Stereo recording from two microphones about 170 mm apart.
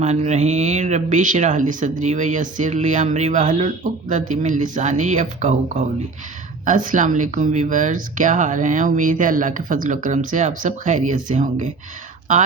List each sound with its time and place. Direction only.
0.0 s speech: 40° right (ahead or behind)